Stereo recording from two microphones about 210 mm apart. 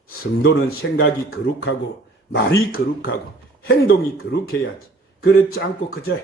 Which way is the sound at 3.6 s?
60° left (ahead or behind).